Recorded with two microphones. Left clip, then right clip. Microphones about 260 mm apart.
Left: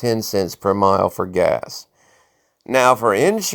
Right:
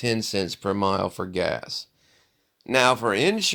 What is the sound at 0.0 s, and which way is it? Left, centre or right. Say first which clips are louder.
Speech: left 6 dB; centre.